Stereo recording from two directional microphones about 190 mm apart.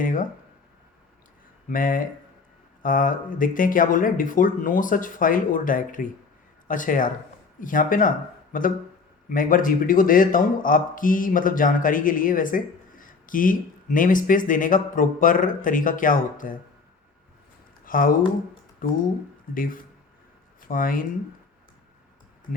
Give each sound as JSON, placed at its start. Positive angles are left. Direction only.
{"t": 0.0, "sound": "speech", "side_deg": 45}
{"t": 1.7, "sound": "speech", "side_deg": 45}
{"t": 17.8, "sound": "speech", "side_deg": 45}